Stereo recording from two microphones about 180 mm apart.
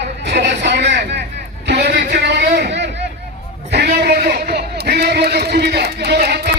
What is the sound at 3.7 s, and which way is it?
A man's voice, 65° right (ahead or behind).